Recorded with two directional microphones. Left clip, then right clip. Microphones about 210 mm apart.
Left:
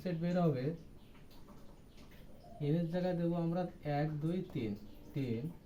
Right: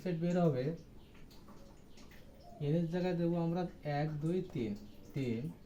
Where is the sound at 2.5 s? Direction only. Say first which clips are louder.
Even; 15° left (ahead or behind).